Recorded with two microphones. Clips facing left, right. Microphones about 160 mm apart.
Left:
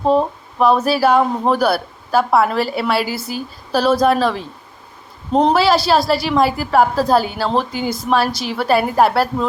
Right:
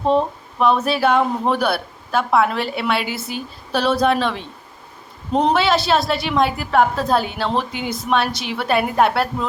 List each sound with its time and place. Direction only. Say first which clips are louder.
0.0 s a woman's voice: left 2 dB; 5° left (ahead or behind)
3.0 s speech: left 4 dB; 35° left (ahead or behind)
3.3 s a woman's voice: left 4 dB; 5° left (ahead or behind)
5.3 s speech: left 3 dB; 35° left (ahead or behind)
5.5 s a woman's voice: left 3 dB; 5° left (ahead or behind)
7.7 s speech: left 4 dB; 35° left (ahead or behind)
8.5 s a woman's voice: left 3 dB; centre (ahead or behind)